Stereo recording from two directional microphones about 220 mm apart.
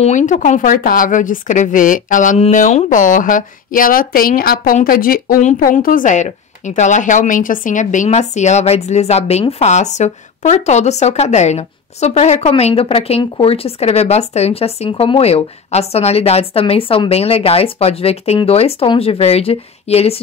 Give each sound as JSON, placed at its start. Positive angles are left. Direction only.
{"t": 0.0, "sound": "speech", "side_deg": 35}